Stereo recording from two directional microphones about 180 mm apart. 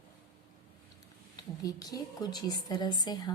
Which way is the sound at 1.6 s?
20° left (ahead or behind).